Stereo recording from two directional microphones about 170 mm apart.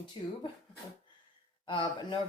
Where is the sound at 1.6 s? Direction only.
30° left (ahead or behind).